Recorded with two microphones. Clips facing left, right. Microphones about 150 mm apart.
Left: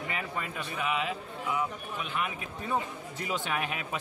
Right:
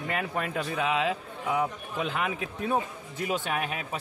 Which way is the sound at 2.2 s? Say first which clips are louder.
Right 5 dB; 80° right.